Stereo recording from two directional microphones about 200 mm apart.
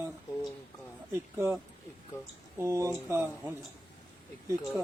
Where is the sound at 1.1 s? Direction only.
15° right (ahead or behind).